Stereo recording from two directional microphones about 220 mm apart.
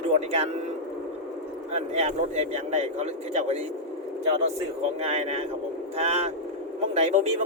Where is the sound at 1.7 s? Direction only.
30° right (ahead or behind).